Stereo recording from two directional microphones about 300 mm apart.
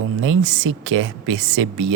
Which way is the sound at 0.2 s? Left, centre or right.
Right.